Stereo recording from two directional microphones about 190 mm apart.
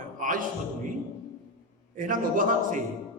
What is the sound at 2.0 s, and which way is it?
Speech, 45° right (ahead or behind).